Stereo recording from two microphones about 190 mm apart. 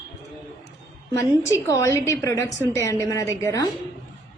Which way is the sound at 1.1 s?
15° left (ahead or behind).